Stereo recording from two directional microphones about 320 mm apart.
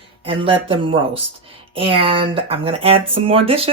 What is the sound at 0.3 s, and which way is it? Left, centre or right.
Speech, centre.